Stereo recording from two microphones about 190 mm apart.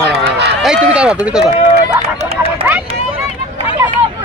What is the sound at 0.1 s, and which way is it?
Run, 60° right (ahead or behind).